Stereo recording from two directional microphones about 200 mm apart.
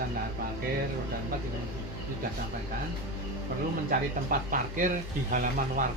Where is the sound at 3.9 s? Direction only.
45° right (ahead or behind).